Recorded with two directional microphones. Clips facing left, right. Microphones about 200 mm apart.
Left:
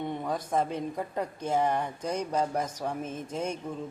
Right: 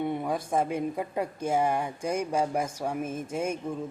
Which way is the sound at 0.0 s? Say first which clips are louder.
Right 3 dB; 10° right (ahead or behind).